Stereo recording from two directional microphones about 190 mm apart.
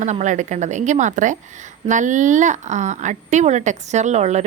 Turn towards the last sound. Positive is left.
turn(degrees=-35)  # may be behind; listen again after turning